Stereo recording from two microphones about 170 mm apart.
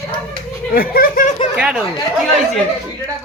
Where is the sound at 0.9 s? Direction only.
55° left (ahead or behind).